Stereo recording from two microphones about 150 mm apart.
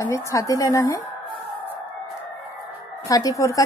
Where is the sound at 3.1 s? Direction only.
25° left (ahead or behind).